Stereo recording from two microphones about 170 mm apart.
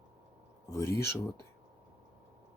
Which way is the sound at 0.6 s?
20° left (ahead or behind).